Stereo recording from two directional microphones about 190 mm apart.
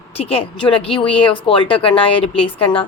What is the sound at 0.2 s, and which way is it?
A woman's voice, 30° left (ahead or behind).